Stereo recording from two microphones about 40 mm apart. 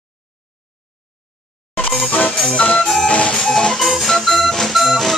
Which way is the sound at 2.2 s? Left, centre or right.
Left.